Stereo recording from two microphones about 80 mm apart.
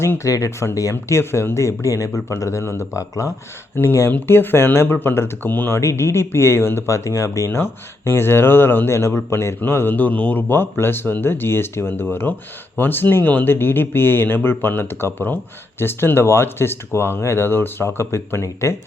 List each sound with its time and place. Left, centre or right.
0.0 s speech: left